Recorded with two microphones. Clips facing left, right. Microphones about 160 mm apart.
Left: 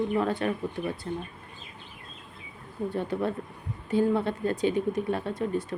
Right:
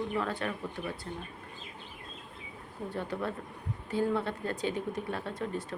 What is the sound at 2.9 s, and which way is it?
Speech, 20° left (ahead or behind).